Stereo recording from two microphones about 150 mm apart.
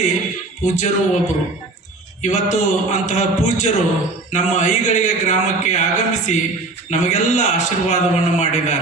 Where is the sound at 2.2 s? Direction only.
50° left (ahead or behind).